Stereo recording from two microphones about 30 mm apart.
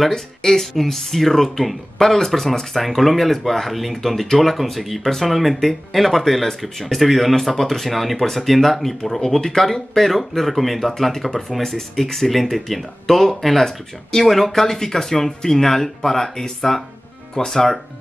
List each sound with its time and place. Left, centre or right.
0.1 s speech: centre
9.2 s speech: centre